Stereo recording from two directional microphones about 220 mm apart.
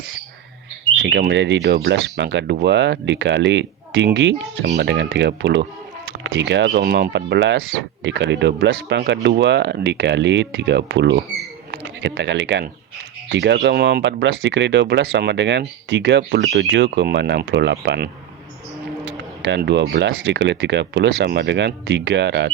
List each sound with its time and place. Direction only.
1.0 s speech: 50° right (ahead or behind)